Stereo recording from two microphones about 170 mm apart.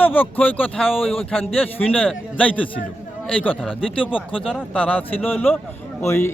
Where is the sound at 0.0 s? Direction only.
10° left (ahead or behind).